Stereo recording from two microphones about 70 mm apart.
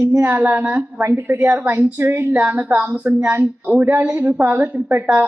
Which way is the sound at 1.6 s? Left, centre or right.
Right.